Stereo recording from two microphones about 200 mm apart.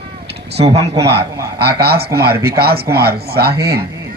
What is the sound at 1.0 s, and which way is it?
Speech, 55° right (ahead or behind).